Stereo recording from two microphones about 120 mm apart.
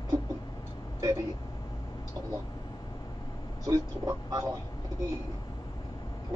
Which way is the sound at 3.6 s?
30° right (ahead or behind).